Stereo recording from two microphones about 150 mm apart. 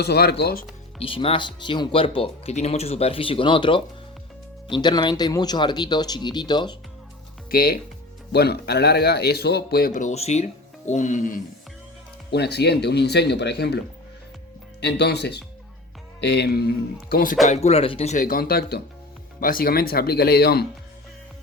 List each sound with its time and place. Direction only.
0.0 s a man's voice: 90° left
0.9 s speech: 40° left (ahead or behind)
7.5 s a man's voice: 80° left
9.9 s speech: 50° left (ahead or behind)
12.3 s a man's voice: 90° left
14.8 s a man's voice: 90° left
17.5 s speech: 45° left (ahead or behind)
18.3 s a man's voice: 80° left
19.4 s a man's voice: 70° left (ahead or behind); by 20.7 s 90° left